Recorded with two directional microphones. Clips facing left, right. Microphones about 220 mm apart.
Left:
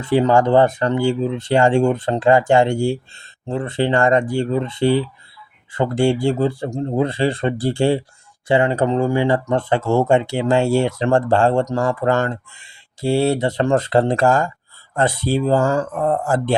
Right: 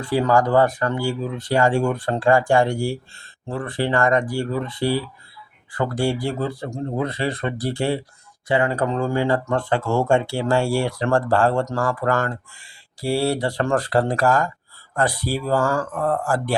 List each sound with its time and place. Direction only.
0.0 s speech: 20° left (ahead or behind)